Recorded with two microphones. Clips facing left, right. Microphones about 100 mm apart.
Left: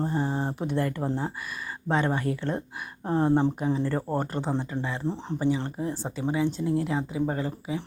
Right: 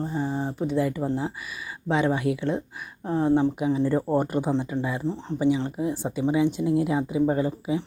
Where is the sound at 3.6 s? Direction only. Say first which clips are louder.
Right 4 dB; 10° right (ahead or behind).